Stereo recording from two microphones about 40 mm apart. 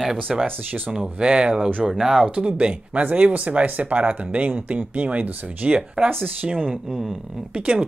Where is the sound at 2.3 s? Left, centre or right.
Right.